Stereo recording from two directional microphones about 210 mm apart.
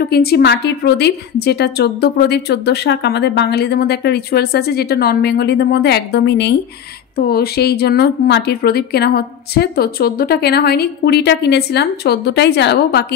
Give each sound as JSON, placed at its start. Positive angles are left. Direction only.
{"t": 0.0, "sound": "a woman's voice", "side_deg": 50}